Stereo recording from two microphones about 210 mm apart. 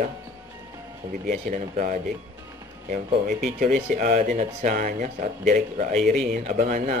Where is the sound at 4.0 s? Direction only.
40° right (ahead or behind).